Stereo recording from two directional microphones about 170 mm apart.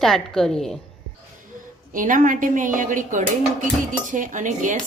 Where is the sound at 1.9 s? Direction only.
50° right (ahead or behind).